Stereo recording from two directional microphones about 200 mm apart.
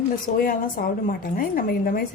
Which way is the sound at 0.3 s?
45° left (ahead or behind).